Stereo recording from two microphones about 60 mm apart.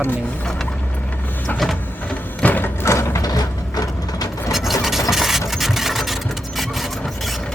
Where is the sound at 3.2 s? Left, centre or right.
Left.